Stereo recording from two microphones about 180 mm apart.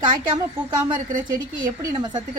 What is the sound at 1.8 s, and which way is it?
Speech, 20° right (ahead or behind).